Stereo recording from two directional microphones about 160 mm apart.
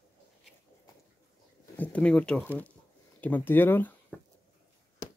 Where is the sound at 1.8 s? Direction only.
10° left (ahead or behind).